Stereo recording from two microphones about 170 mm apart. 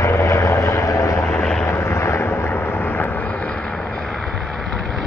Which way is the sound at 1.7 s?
15° left (ahead or behind).